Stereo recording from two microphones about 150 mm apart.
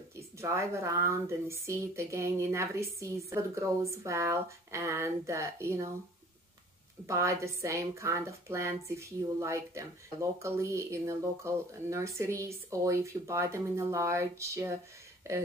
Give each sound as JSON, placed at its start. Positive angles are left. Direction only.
{"t": 0.1, "sound": "speech", "side_deg": -20}
{"t": 7.1, "sound": "speech", "side_deg": -20}